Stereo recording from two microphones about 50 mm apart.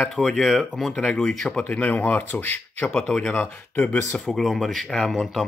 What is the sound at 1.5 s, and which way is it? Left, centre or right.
A man's voice, left.